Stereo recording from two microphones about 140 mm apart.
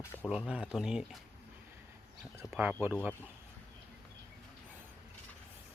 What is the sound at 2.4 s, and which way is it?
Speech, 15° right (ahead or behind).